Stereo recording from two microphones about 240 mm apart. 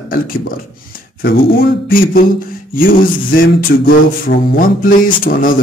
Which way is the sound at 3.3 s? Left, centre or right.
Left.